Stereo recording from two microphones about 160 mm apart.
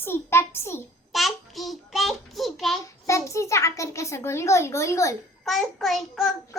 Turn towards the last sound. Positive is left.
turn(degrees=0)  # may be behind; listen again after turning